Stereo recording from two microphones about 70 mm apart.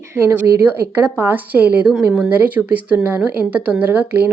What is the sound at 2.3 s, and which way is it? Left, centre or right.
A woman's voice, right.